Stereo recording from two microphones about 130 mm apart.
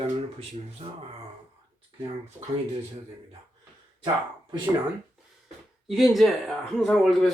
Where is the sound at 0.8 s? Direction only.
50° right (ahead or behind).